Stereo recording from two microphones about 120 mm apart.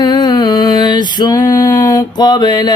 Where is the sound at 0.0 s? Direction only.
35° left (ahead or behind).